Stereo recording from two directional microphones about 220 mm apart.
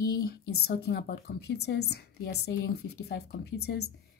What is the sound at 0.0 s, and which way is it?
Speech, 45° left (ahead or behind).